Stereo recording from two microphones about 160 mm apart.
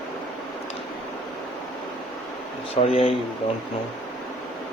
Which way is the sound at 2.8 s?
40° left (ahead or behind).